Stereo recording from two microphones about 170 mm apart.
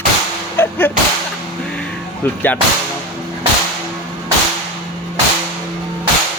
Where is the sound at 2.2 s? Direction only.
10° left (ahead or behind).